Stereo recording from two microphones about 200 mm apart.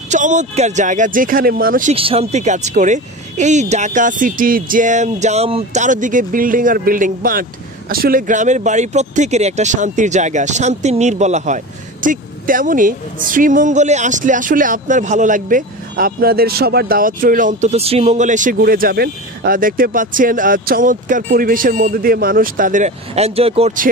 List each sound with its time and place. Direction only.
0.1 s speech: 35° right (ahead or behind)
2.0 s speech: 30° right (ahead or behind)